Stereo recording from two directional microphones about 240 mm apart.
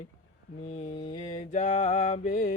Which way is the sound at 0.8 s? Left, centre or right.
Left.